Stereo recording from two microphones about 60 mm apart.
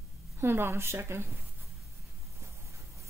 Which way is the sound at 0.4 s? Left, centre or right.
Right.